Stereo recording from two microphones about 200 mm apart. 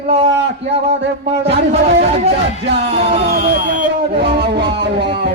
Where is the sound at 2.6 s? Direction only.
60° right (ahead or behind).